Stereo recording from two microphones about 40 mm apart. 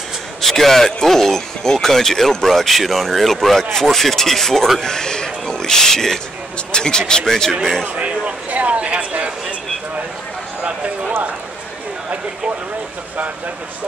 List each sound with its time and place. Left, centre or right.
0.4 s speech: centre
7.8 s speech: right